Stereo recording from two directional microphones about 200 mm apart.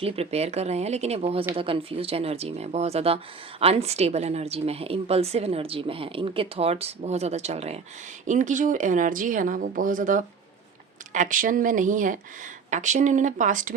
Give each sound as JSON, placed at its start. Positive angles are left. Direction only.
{"t": 0.0, "sound": "a woman's voice", "side_deg": -30}